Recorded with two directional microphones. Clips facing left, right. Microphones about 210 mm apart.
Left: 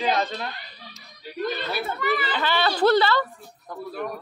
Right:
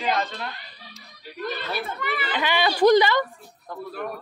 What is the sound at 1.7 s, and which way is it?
Chatter, 5° left (ahead or behind).